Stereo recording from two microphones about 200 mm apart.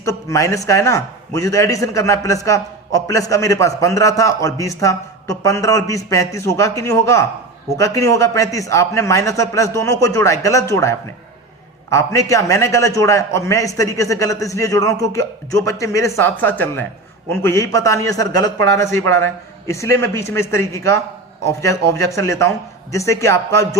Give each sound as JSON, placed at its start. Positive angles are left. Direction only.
{"t": 0.0, "sound": "a man's voice", "side_deg": 15}